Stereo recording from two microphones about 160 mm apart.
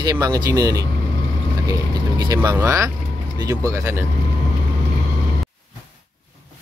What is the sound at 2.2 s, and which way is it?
Speech, 20° right (ahead or behind).